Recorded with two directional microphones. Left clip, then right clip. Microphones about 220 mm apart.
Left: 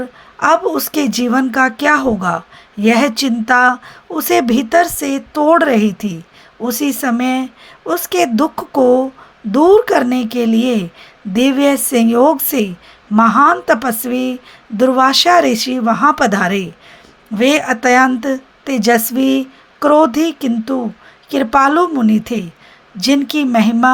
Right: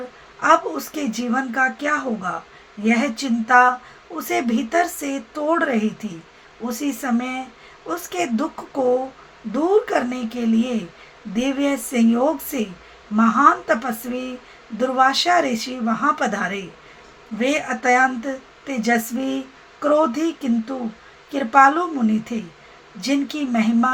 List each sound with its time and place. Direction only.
0.3 s speech: 45° left (ahead or behind)